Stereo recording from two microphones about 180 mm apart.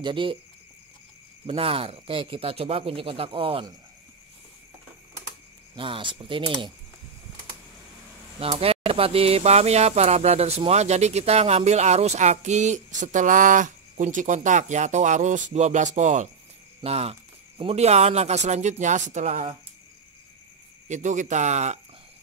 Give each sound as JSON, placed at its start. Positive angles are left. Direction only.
{"t": 0.0, "sound": "speech", "side_deg": -30}
{"t": 1.4, "sound": "speech", "side_deg": -30}
{"t": 5.8, "sound": "speech", "side_deg": -30}
{"t": 8.4, "sound": "speech", "side_deg": -30}
{"t": 20.9, "sound": "speech", "side_deg": -45}